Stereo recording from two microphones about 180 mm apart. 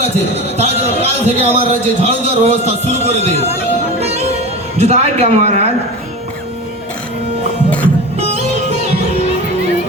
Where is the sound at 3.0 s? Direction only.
35° right (ahead or behind).